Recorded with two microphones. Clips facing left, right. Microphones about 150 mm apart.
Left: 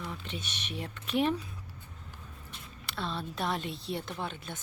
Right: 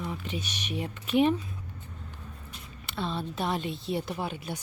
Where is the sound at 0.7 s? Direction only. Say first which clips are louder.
Right 5 dB; 5° right (ahead or behind).